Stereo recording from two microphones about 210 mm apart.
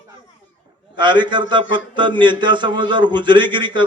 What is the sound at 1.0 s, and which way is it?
A man's voice, 20° right (ahead or behind).